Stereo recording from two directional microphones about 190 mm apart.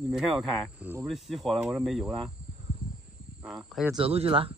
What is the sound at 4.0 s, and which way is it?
Speech, 30° right (ahead or behind).